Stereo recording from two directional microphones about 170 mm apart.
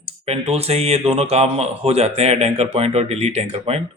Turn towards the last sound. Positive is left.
turn(degrees=-35)  # may be behind; listen again after turning